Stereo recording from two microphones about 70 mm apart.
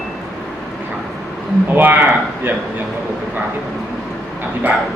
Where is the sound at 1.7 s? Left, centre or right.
Right.